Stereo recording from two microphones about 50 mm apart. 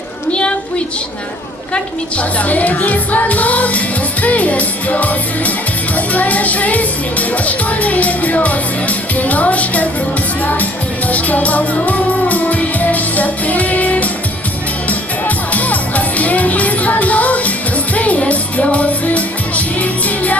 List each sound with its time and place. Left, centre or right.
1.7 s speech: left
11.1 s music: left
15.5 s music: left